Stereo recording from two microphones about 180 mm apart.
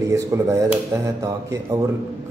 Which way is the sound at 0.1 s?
20° right (ahead or behind).